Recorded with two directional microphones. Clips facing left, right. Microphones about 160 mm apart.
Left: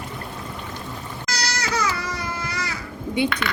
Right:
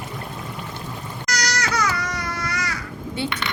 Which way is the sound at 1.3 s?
25° left (ahead or behind).